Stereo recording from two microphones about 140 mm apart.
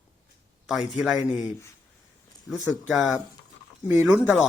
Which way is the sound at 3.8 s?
15° right (ahead or behind).